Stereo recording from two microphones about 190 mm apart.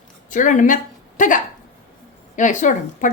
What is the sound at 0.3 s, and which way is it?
A woman's voice, 45° left (ahead or behind).